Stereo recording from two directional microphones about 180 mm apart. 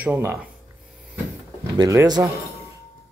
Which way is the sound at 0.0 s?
10° right (ahead or behind).